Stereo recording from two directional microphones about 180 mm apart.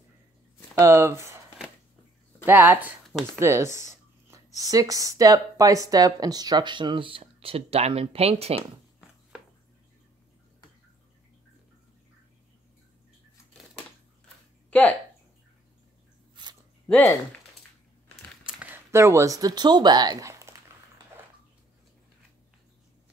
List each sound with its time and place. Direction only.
0.7 s speech: 15° right (ahead or behind)
2.4 s speech: 10° right (ahead or behind); by 8.6 s 35° right (ahead or behind)
14.7 s speech: 5° left (ahead or behind)
16.4 s a sound: 25° right (ahead or behind)
16.8 s speech: 10° left (ahead or behind)
18.4 s speech: 5° right (ahead or behind)